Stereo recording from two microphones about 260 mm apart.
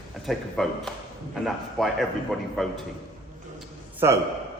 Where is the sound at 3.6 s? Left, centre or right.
Centre.